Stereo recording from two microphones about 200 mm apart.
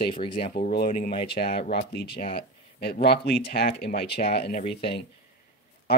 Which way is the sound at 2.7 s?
55° left (ahead or behind).